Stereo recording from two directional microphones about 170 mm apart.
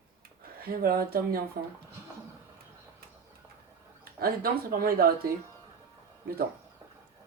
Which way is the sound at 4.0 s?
60° right (ahead or behind).